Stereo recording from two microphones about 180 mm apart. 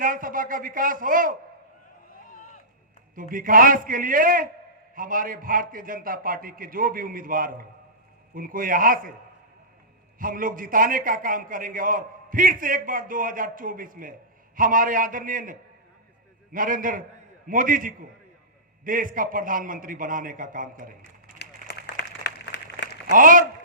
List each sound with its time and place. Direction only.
0.0 s a man's voice: 50° right (ahead or behind)
2.1 s a sound: 50° left (ahead or behind)
3.2 s a man's voice: 50° right (ahead or behind)
10.2 s a man's voice: 50° right (ahead or behind)
21.3 s a sound: 70° left (ahead or behind)
23.1 s a man's voice: 50° right (ahead or behind)